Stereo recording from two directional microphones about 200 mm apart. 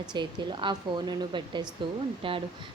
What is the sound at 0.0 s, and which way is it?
A woman's voice, 20° right (ahead or behind).